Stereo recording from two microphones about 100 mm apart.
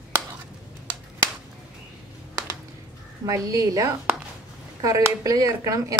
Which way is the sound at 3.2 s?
35° right (ahead or behind).